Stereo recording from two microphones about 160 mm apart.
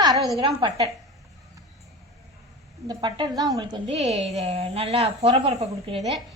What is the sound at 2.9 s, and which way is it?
Speech, 25° right (ahead or behind).